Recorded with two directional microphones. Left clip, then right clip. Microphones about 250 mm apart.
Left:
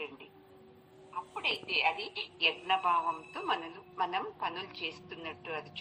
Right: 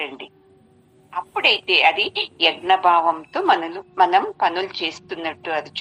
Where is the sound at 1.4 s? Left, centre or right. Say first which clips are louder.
Right 16 dB; right.